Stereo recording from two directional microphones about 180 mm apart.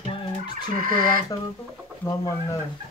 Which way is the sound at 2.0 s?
20° left (ahead or behind).